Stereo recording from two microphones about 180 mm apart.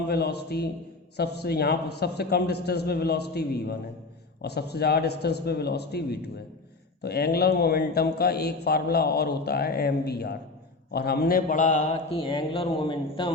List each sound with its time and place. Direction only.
0.1 s a man's voice: 65° left (ahead or behind); by 12.2 s 40° left (ahead or behind)
12.3 s speech: 25° left (ahead or behind)